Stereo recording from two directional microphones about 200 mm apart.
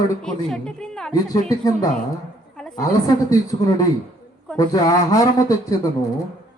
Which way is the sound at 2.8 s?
20° left (ahead or behind).